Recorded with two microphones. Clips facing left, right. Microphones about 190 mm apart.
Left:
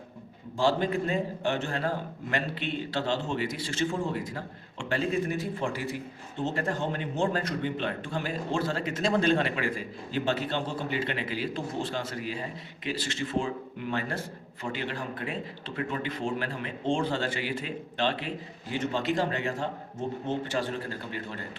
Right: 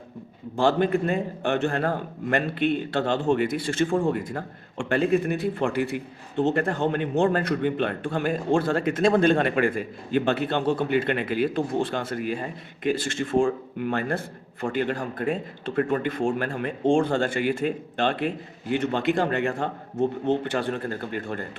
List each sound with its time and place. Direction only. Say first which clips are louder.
0.5 s a man's voice: right 5 dB; 55° right (ahead or behind)